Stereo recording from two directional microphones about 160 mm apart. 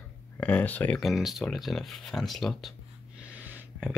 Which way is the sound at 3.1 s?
10° right (ahead or behind).